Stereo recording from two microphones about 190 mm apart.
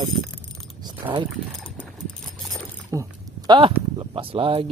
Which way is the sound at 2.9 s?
20° right (ahead or behind).